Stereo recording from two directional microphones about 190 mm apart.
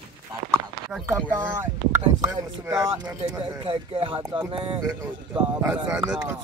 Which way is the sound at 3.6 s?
30° right (ahead or behind).